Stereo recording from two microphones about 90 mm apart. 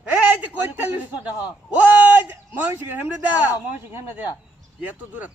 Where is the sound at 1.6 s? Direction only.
15° right (ahead or behind).